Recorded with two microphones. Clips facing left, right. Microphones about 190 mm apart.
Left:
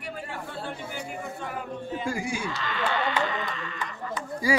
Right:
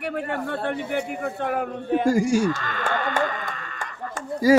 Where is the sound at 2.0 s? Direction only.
45° right (ahead or behind).